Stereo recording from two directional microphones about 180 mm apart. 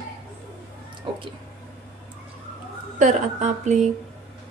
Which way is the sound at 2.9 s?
40° right (ahead or behind).